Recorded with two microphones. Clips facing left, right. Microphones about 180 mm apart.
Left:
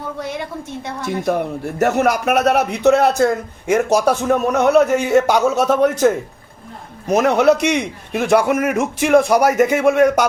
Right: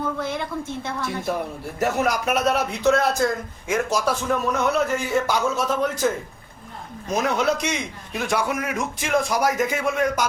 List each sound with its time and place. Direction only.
1.0 s speech: 60° left (ahead or behind)